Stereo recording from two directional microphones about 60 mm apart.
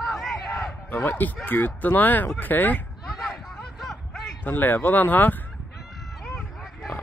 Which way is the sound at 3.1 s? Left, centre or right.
Centre.